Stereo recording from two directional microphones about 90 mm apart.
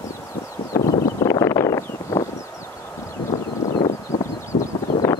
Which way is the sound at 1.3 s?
35° left (ahead or behind).